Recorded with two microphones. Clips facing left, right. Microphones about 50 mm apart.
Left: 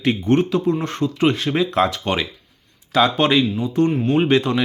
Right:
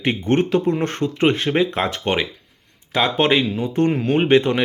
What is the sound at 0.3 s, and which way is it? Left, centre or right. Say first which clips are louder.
Speech: right 1 dB; right.